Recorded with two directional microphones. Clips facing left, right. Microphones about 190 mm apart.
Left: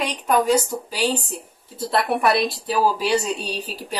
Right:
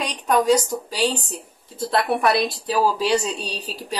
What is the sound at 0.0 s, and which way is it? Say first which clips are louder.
A woman's voice: even; 5° left (ahead or behind).